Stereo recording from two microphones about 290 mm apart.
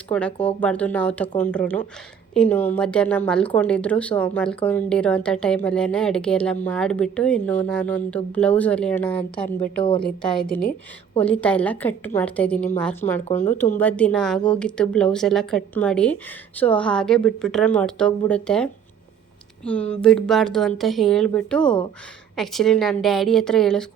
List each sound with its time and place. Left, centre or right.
0.1 s speech: centre
13.2 s speech: left
13.7 s speech: centre